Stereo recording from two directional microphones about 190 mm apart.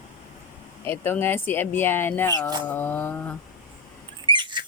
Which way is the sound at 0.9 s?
10° left (ahead or behind).